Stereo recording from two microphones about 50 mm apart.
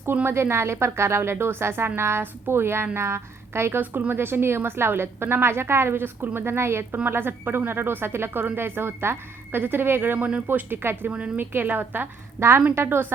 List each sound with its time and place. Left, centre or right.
0.3 s a woman's voice: right
3.8 s a woman's voice: right
6.9 s a woman's voice: right
10.2 s speech: right
10.5 s a woman's voice: right
12.4 s a woman's voice: right